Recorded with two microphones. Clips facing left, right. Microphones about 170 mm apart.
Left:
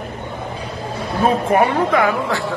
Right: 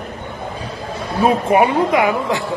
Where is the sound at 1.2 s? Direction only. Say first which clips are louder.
Right 2 dB; 10° right (ahead or behind).